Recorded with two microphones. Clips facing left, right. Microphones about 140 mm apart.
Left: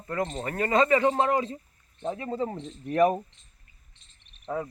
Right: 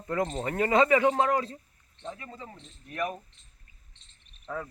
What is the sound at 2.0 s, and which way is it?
Speech, 35° left (ahead or behind).